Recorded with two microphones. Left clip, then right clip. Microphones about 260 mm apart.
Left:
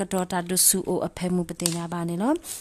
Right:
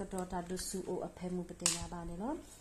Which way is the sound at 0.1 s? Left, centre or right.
Left.